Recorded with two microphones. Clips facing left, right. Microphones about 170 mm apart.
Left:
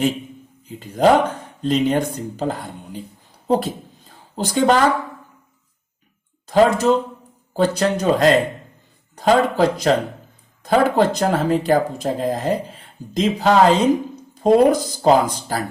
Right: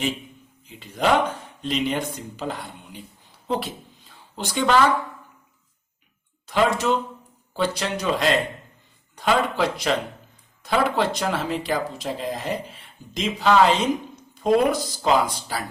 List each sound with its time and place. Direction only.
0.7 s speech: 40° left (ahead or behind)
3.4 s a sound: 40° left (ahead or behind)
6.5 s speech: 40° left (ahead or behind)